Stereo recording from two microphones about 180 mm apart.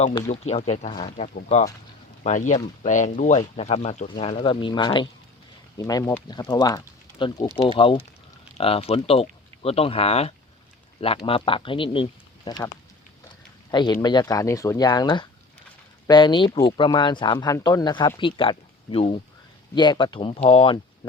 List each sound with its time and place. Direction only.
0.3 s speech: 35° left (ahead or behind)
12.5 s speech: 20° left (ahead or behind)